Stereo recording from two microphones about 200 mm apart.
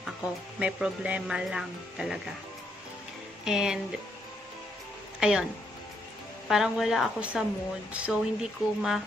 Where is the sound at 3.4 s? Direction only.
5° right (ahead or behind).